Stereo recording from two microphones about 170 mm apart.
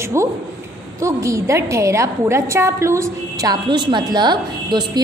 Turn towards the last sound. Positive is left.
turn(degrees=-25)  # may be behind; listen again after turning